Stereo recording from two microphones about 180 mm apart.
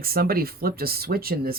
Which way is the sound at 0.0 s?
55° right (ahead or behind).